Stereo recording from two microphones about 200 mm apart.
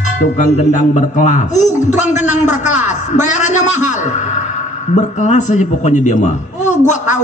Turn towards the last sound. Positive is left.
turn(degrees=35)  # may be behind; listen again after turning